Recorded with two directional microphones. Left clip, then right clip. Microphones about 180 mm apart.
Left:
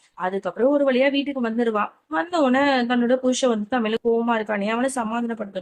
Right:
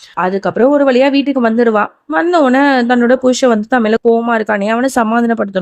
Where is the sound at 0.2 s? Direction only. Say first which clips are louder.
Right 10 dB; 45° right (ahead or behind).